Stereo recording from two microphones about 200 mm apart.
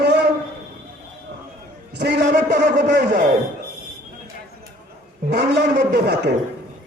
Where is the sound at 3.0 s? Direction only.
45° right (ahead or behind).